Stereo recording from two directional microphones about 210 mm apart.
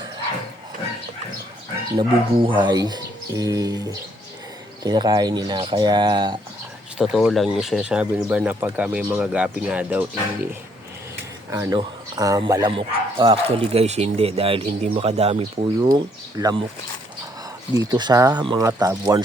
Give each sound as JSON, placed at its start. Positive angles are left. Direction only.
{"t": 2.0, "sound": "speech", "side_deg": -20}
{"t": 7.0, "sound": "speech", "side_deg": 0}
{"t": 15.9, "sound": "speech", "side_deg": -15}
{"t": 17.7, "sound": "speech", "side_deg": -20}